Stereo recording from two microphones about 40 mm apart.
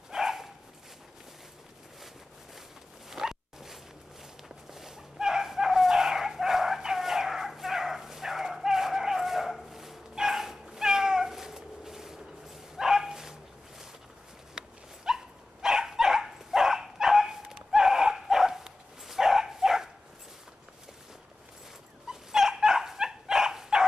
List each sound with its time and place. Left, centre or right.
0.1 s dog: centre
3.1 s dog: centre
4.7 s chicken: centre
10.1 s cat: centre
12.7 s dog: centre
15.1 s dog: centre
22.0 s dog: centre